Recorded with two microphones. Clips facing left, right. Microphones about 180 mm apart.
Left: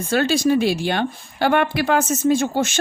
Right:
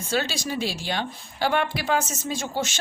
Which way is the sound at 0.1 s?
55° left (ahead or behind).